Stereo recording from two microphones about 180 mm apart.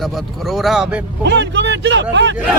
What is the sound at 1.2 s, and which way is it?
Speech, 75° right (ahead or behind).